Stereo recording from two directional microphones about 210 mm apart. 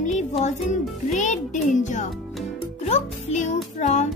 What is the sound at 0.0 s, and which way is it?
A child's voice, 35° left (ahead or behind).